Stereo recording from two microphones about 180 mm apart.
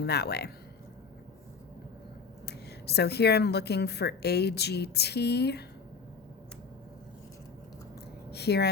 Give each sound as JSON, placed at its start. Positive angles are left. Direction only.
{"t": 0.0, "sound": "a woman's voice", "side_deg": 65}
{"t": 2.5, "sound": "a woman's voice", "side_deg": 65}
{"t": 8.3, "sound": "a woman's voice", "side_deg": 65}